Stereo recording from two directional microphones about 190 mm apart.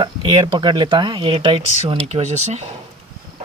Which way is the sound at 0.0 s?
25° right (ahead or behind).